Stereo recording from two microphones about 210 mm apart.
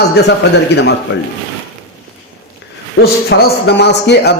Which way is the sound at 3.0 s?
50° left (ahead or behind).